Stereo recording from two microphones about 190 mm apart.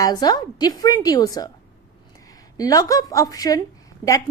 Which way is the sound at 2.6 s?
20° left (ahead or behind).